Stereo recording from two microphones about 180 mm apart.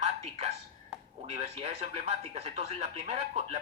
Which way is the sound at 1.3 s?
35° right (ahead or behind).